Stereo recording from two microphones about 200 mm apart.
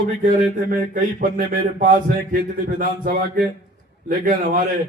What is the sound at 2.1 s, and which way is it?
A man's voice, 45° right (ahead or behind).